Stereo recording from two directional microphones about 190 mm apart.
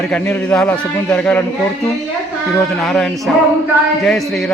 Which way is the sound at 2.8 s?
Centre (ahead or behind).